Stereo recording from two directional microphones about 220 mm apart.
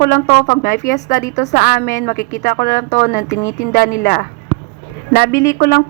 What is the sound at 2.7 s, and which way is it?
A woman's voice, 35° left (ahead or behind).